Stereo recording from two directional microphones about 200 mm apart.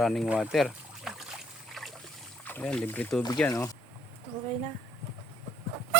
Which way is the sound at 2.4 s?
5° left (ahead or behind).